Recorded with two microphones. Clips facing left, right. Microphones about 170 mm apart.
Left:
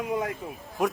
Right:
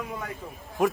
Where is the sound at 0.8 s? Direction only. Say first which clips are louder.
Right 2 dB; centre (ahead or behind).